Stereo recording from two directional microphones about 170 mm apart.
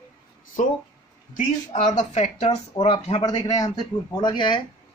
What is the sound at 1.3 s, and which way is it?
Speech, 45° left (ahead or behind).